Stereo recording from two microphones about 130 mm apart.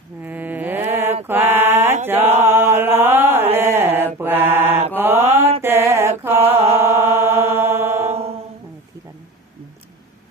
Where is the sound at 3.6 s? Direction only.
15° right (ahead or behind).